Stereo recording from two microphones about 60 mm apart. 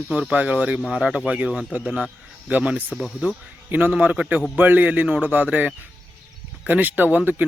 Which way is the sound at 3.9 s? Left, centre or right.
Right.